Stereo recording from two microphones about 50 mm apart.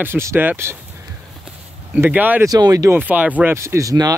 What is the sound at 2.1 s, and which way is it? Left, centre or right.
Speech, right.